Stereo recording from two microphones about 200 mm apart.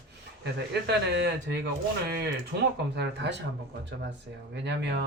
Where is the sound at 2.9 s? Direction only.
60° right (ahead or behind).